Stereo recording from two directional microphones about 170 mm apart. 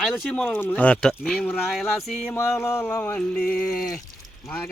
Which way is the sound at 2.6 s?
15° left (ahead or behind).